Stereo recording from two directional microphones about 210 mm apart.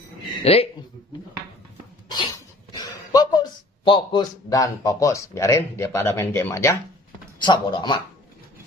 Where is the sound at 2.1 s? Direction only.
20° left (ahead or behind).